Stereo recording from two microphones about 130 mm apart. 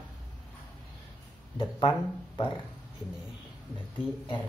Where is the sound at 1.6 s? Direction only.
35° left (ahead or behind).